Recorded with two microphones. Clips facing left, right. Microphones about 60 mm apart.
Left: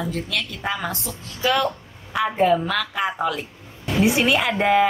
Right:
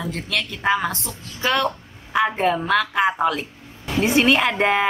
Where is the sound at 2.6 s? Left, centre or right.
Centre.